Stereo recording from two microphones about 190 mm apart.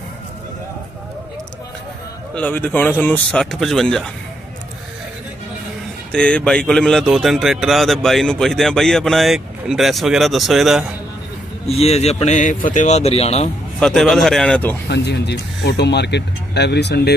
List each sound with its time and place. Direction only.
2.3 s speech: 10° left (ahead or behind)
6.1 s speech: 5° left (ahead or behind)
11.6 s speech: 35° left (ahead or behind)
13.7 s speech: centre (ahead or behind)
14.9 s speech: 60° left (ahead or behind)